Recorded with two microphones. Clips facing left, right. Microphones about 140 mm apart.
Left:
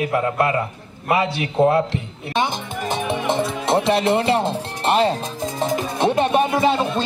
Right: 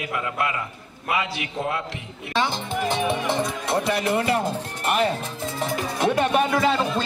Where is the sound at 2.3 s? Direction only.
20° left (ahead or behind).